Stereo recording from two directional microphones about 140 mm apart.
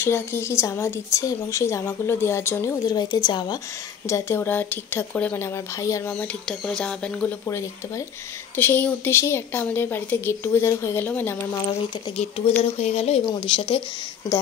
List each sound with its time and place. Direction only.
0.0 s speech: 20° left (ahead or behind)
2.9 s a woman's voice: 30° left (ahead or behind)
4.1 s a woman's voice: 20° left (ahead or behind)
6.1 s a woman's voice: 5° left (ahead or behind)
8.5 s a woman's voice: 15° left (ahead or behind)
12.2 s speech: 45° left (ahead or behind)
13.2 s a woman's voice: 35° left (ahead or behind)